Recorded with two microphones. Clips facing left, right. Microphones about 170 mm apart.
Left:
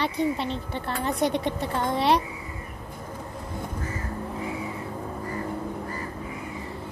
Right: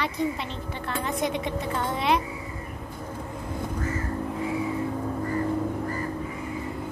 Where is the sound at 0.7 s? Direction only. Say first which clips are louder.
Left 1 dB; 35° left (ahead or behind).